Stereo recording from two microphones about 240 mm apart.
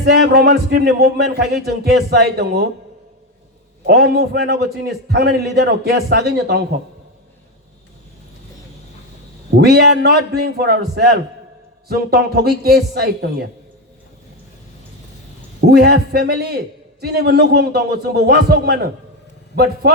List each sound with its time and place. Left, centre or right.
0.3 s a man's voice: right
3.8 s a man's voice: right
9.6 s a man's voice: right
15.6 s a man's voice: right